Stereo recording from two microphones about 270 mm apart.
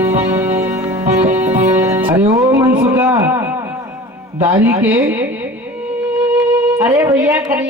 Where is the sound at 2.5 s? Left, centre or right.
Centre.